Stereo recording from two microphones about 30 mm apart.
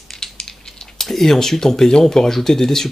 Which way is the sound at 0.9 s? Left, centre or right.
Centre.